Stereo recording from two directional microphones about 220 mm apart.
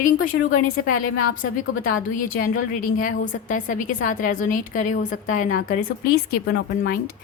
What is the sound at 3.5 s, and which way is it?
A woman's voice, 35° left (ahead or behind).